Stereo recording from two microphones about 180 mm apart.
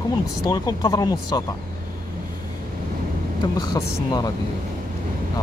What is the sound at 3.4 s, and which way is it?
Speech, 25° left (ahead or behind).